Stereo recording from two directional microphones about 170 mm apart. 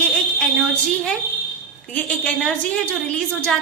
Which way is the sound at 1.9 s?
5° left (ahead or behind).